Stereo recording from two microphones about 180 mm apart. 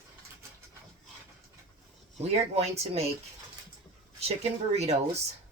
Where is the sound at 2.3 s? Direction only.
35° right (ahead or behind).